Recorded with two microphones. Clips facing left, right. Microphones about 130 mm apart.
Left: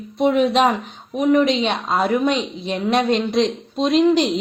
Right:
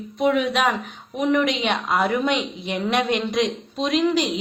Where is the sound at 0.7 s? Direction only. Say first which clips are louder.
Left 3 dB; 15° left (ahead or behind).